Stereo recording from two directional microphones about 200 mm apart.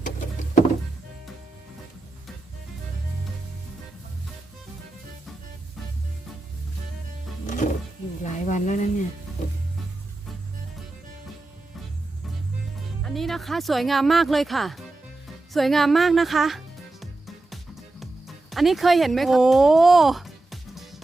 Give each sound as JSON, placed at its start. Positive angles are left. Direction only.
{"t": 0.0, "sound": "vehicle", "side_deg": 40}
{"t": 7.4, "sound": "music", "side_deg": 40}
{"t": 13.1, "sound": "speech", "side_deg": 0}
{"t": 15.5, "sound": "music", "side_deg": 0}